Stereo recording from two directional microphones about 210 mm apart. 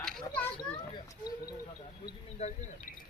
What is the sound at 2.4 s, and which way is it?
Speech, 30° left (ahead or behind).